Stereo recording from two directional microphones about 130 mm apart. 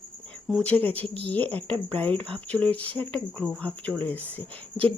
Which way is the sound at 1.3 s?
10° left (ahead or behind).